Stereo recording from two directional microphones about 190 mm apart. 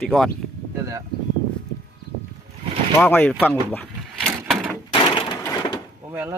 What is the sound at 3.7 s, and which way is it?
Vehicle, 10° left (ahead or behind).